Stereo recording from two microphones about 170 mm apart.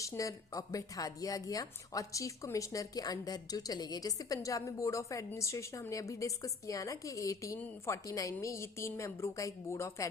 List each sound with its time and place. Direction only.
0.0 s a woman's voice: 20° left (ahead or behind)